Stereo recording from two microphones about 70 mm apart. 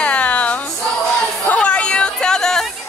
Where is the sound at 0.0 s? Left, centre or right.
Centre.